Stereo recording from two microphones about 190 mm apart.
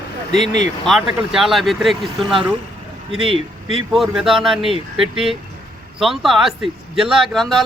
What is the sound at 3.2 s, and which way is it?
Speech, 30° right (ahead or behind).